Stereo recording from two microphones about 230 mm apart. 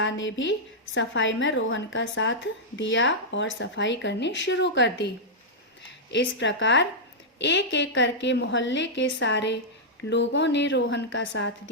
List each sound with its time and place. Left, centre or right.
0.0 s a woman's voice: left